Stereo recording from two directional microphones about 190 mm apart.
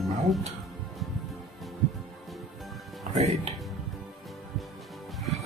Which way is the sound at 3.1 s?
40° right (ahead or behind).